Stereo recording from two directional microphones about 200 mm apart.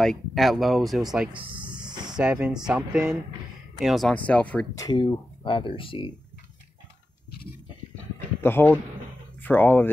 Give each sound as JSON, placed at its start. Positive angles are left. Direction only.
{"t": 0.0, "sound": "speech", "side_deg": 0}
{"t": 1.6, "sound": "a sound", "side_deg": -5}
{"t": 2.1, "sound": "speech", "side_deg": -5}
{"t": 4.7, "sound": "speech", "side_deg": 20}
{"t": 8.4, "sound": "speech", "side_deg": 10}